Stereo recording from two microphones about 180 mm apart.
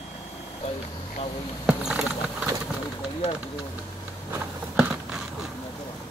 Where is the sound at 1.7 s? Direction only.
5° right (ahead or behind).